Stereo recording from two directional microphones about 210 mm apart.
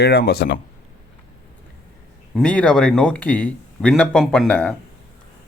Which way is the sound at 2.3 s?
5° left (ahead or behind).